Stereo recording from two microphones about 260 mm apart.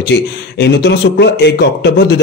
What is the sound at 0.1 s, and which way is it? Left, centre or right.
A man's voice, left.